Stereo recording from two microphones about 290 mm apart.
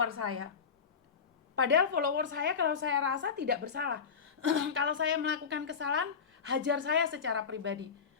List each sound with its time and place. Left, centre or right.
0.0 s speech: right
1.5 s a woman's voice: right